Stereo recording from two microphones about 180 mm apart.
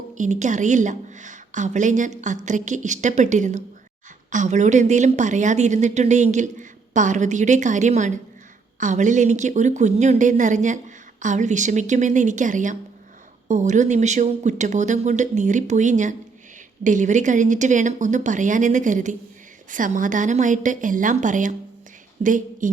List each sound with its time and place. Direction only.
0.2 s a woman's voice: 40° right (ahead or behind)